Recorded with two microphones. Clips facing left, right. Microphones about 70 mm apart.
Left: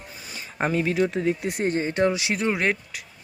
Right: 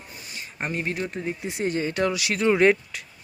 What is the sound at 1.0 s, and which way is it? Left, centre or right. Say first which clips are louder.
Speech: left 6 dB; left.